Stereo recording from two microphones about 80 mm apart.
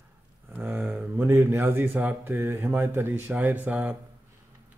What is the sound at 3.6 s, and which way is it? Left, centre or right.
Speech, centre.